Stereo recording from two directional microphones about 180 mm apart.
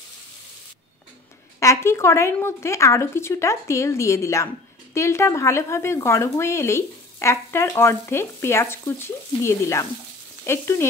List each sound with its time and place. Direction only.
1.6 s speech: 15° left (ahead or behind)